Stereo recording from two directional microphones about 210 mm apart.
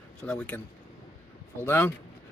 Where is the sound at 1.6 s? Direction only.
10° left (ahead or behind).